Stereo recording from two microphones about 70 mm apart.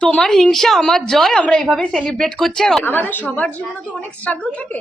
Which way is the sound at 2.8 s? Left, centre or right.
Left.